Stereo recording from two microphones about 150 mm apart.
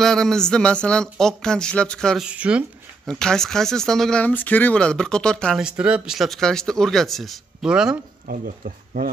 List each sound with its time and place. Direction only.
0.0 s speech: 5° left (ahead or behind)
2.2 s speech: 5° right (ahead or behind)
3.1 s speech: 5° left (ahead or behind)
5.6 s speech: 5° right (ahead or behind)
8.3 s speech: 65° right (ahead or behind)